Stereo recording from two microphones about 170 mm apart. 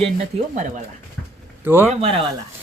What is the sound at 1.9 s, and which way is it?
Speech, 35° right (ahead or behind).